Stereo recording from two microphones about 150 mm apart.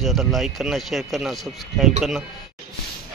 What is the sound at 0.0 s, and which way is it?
Speech, centre (ahead or behind).